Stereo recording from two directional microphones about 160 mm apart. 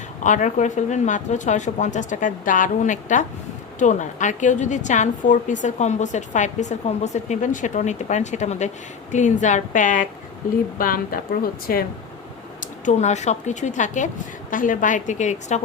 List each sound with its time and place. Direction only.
0.2 s a woman's voice: 50° left (ahead or behind); by 11.9 s 65° left (ahead or behind)
12.5 s a woman's voice: 50° left (ahead or behind)